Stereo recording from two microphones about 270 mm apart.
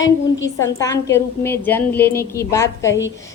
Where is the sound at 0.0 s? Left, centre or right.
Left.